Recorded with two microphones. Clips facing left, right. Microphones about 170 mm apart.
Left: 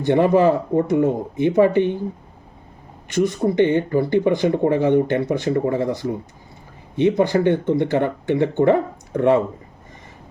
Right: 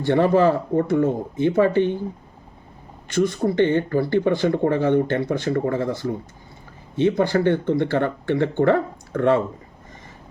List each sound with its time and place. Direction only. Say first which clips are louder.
0.0 s speech: left 2 dB; 20° left (ahead or behind)
3.2 s speech: left 2 dB; 20° left (ahead or behind)